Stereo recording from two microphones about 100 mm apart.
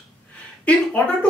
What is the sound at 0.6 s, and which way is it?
Speech, 15° left (ahead or behind).